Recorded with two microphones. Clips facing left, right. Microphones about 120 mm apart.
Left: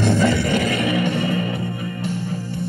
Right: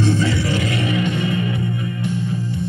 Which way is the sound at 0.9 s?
40° left (ahead or behind).